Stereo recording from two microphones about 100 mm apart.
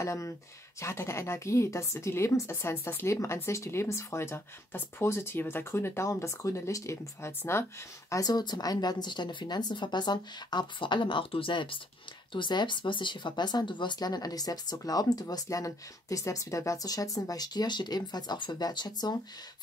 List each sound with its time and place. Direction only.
0.0 s a woman's voice: 30° left (ahead or behind)
8.1 s speech: 40° left (ahead or behind)